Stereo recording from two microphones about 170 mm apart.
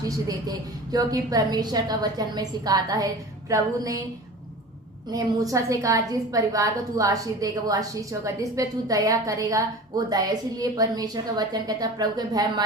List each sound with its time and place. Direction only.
0.0 s a woman's voice: 20° right (ahead or behind)
5.1 s a woman's voice: 20° right (ahead or behind)